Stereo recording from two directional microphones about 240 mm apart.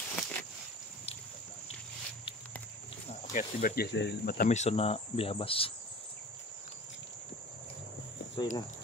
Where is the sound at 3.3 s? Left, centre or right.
Left.